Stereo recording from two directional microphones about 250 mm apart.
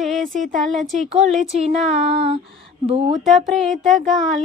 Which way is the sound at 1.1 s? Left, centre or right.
Right.